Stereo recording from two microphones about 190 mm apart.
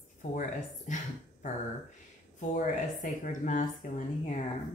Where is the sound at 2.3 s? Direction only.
45° left (ahead or behind).